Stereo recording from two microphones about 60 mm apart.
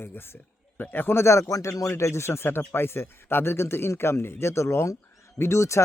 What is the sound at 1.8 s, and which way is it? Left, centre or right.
Speech, left.